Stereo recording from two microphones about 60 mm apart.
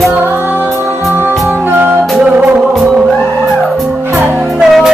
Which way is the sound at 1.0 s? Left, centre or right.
Centre.